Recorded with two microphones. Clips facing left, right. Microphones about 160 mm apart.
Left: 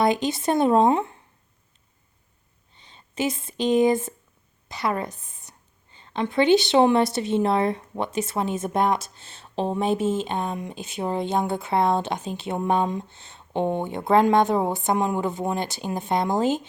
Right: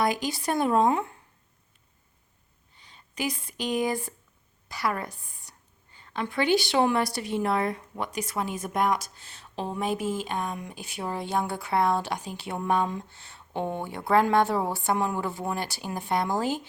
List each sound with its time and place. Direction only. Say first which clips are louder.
0.0 s a woman's voice: left 5 dB; 25° left (ahead or behind)
2.7 s a woman's voice: left 6 dB; 25° left (ahead or behind)